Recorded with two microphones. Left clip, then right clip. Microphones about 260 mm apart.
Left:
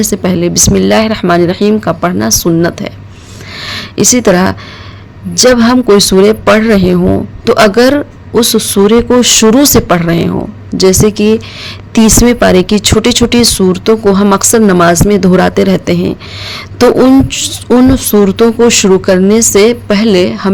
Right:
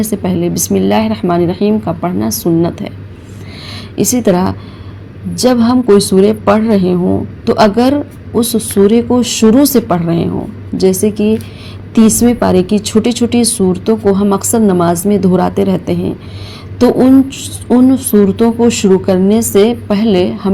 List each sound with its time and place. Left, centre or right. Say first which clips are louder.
0.0 s speech: left 4 dB; left
3.6 s a sound: left 5 dB; left
5.3 s speech: left 5 dB; left